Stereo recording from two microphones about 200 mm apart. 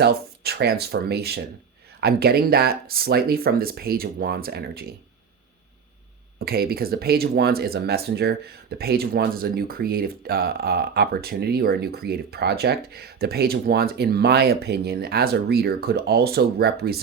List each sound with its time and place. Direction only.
0.0 s speech: 55° right (ahead or behind)
6.4 s speech: 50° right (ahead or behind)